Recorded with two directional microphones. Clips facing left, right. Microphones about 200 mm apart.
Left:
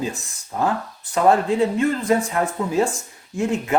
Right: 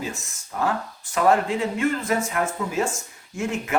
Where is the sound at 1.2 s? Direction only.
35° left (ahead or behind).